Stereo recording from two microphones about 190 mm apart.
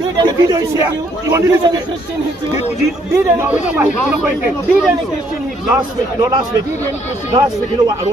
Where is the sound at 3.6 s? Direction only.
5° right (ahead or behind).